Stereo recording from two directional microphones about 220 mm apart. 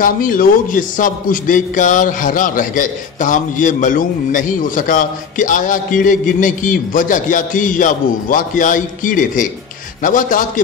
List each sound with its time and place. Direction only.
0.0 s a man's voice: 40° left (ahead or behind)